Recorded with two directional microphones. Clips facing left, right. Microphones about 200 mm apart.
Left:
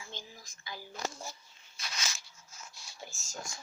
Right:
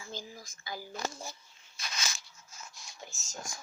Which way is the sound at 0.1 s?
40° right (ahead or behind).